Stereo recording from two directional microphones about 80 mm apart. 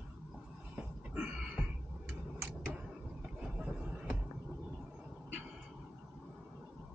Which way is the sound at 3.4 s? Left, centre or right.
Centre.